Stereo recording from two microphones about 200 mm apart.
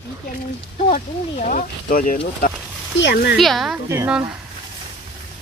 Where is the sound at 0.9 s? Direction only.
40° left (ahead or behind).